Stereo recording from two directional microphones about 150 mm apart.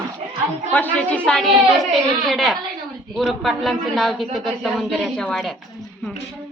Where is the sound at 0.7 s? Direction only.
10° left (ahead or behind).